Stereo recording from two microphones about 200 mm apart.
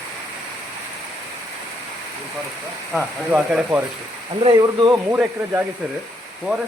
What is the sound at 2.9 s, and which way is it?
Speech, 10° right (ahead or behind).